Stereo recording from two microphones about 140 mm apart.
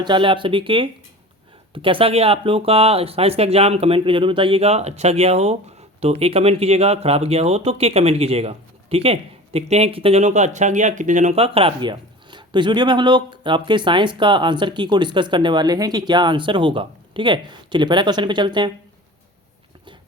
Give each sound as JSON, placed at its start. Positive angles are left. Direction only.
{"t": 0.0, "sound": "speech", "side_deg": -35}